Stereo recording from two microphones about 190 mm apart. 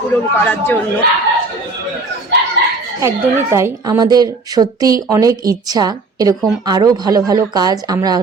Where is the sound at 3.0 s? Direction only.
15° right (ahead or behind).